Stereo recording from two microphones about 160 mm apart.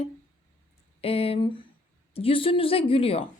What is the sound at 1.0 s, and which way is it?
A woman's voice, 35° left (ahead or behind).